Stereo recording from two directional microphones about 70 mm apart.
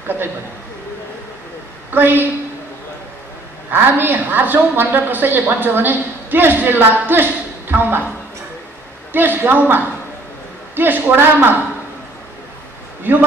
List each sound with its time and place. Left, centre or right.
1.9 s a woman's voice: right
3.7 s a woman's voice: right
9.1 s a woman's voice: right